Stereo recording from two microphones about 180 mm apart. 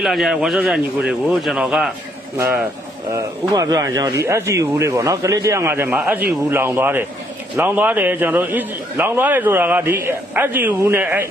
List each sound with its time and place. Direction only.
0.0 s a man's voice: centre (ahead or behind)
3.1 s a man's voice: 20° right (ahead or behind)